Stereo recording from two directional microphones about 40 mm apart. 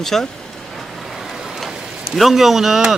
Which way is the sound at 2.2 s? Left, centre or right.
Centre.